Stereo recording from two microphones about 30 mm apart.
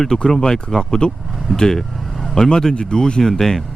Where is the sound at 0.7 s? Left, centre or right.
Centre.